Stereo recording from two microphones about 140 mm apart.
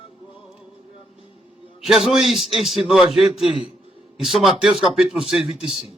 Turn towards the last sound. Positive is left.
turn(degrees=-5)  # may be behind; listen again after turning